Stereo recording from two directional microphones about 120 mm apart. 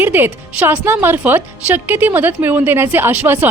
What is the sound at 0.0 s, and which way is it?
A woman's voice, 15° right (ahead or behind).